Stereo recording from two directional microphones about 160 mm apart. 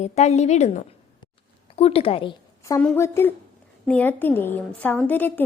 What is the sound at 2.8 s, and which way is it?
A woman's voice, 15° left (ahead or behind).